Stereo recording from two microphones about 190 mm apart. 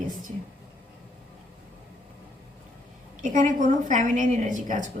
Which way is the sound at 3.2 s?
40° right (ahead or behind).